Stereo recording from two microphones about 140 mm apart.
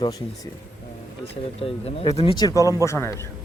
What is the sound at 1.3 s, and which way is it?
Speech, 45° left (ahead or behind).